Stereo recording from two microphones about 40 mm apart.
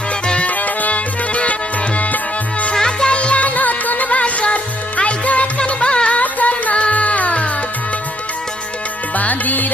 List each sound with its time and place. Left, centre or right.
0.3 s music: left
2.7 s music: centre
3.1 s music: left
9.1 s music: left